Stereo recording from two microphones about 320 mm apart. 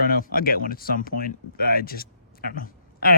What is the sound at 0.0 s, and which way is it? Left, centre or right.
Speech, left.